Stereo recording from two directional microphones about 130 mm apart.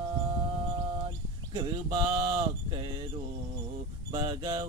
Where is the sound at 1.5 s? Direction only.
35° right (ahead or behind).